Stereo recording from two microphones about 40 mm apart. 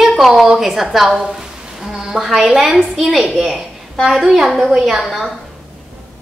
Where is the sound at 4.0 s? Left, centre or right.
Centre.